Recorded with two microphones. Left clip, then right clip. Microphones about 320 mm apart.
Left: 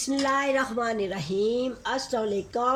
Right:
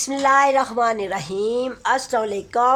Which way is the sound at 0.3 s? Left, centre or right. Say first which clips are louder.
Right 11 dB; centre.